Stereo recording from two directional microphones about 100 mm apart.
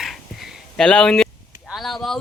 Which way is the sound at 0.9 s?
10° left (ahead or behind).